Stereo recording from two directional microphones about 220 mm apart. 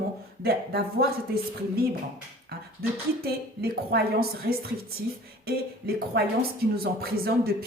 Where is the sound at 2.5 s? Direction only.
45° right (ahead or behind).